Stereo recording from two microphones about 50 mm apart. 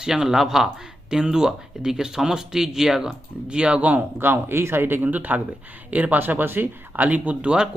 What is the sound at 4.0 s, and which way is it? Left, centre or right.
Speech, right.